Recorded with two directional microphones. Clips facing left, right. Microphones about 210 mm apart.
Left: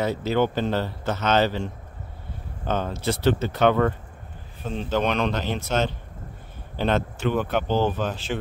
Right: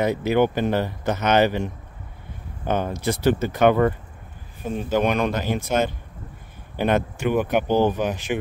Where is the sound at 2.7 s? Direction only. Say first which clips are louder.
Right 2 dB; 15° right (ahead or behind).